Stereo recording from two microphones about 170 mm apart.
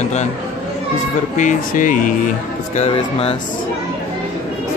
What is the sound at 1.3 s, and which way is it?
Speech, 50° left (ahead or behind).